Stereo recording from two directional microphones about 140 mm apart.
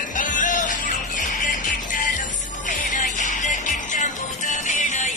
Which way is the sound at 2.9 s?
65° left (ahead or behind).